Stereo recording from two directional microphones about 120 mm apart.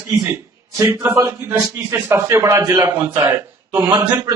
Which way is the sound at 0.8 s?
20° right (ahead or behind).